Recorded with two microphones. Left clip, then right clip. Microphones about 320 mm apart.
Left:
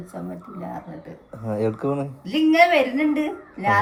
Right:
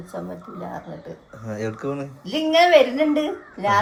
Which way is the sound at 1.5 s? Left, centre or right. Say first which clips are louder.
Left 4 dB; centre.